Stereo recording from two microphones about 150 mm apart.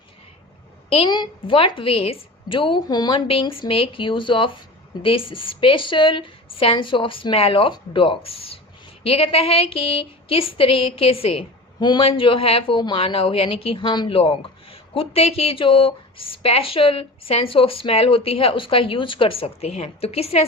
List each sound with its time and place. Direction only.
0.9 s a woman's voice: 30° left (ahead or behind)